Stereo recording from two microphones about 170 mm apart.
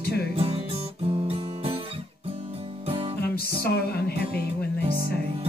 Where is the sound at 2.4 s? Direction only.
35° right (ahead or behind).